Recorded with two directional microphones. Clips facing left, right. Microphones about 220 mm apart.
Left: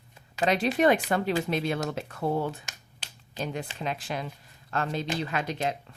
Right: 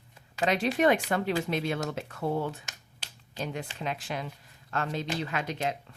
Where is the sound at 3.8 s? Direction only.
35° left (ahead or behind).